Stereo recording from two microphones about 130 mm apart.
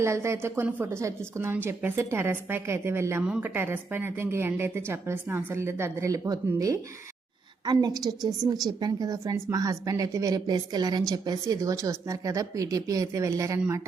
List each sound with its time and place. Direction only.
0.0 s a woman's voice: 20° right (ahead or behind)